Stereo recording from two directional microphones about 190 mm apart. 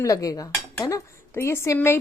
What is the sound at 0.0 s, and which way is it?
Speech, 20° left (ahead or behind).